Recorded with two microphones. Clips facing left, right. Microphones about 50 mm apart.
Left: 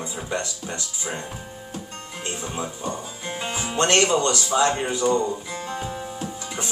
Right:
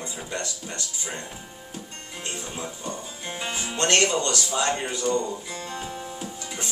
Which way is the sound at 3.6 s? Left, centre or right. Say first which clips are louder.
Left 3 dB; left.